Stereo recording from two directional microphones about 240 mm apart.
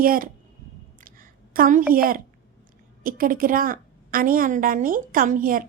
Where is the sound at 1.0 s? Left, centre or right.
Right.